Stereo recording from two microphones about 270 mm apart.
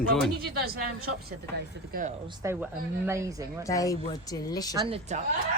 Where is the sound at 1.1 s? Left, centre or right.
Right.